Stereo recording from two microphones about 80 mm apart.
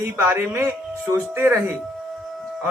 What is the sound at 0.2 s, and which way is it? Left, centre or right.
A man's voice, right.